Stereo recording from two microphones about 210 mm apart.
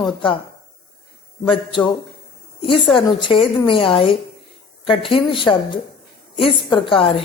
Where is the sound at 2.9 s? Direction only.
25° left (ahead or behind).